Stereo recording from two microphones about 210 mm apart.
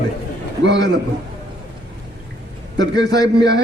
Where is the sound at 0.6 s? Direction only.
55° right (ahead or behind).